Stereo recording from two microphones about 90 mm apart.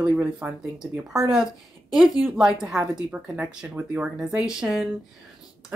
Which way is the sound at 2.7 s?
10° right (ahead or behind).